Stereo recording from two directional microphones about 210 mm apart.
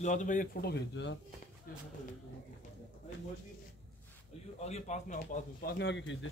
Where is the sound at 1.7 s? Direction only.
45° left (ahead or behind).